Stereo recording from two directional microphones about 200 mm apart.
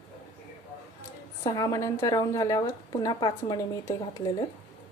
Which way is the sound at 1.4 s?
20° left (ahead or behind).